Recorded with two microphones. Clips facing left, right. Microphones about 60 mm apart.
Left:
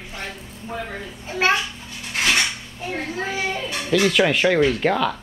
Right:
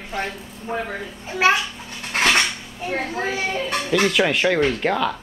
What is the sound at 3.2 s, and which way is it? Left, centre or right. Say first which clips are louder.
Speech: right 1 dB; centre.